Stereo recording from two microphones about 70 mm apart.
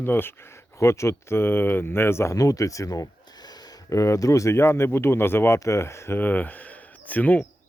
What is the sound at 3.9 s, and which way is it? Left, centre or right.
Speech, left.